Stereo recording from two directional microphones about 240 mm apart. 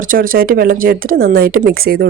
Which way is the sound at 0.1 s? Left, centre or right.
Right.